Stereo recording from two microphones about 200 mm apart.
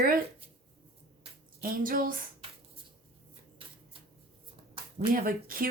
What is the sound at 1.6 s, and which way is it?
Speech, 45° right (ahead or behind).